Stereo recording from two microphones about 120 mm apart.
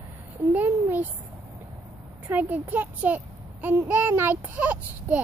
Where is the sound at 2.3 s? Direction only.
15° right (ahead or behind).